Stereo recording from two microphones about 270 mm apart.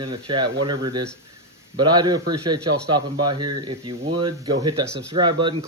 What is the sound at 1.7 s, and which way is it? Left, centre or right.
Speech, centre.